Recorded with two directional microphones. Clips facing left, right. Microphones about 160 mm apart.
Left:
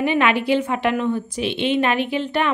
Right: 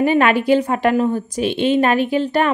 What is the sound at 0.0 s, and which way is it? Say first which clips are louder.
A woman's voice: right 4 dB; 45° right (ahead or behind).